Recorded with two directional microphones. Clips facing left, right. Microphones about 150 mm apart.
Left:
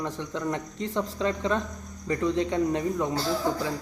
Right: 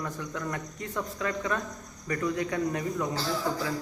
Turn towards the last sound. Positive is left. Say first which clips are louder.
# left 3 dB
turn(degrees=25)  # may be behind; listen again after turning